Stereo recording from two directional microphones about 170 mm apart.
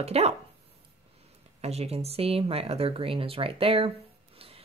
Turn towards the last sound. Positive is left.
turn(degrees=-35)  # may be behind; listen again after turning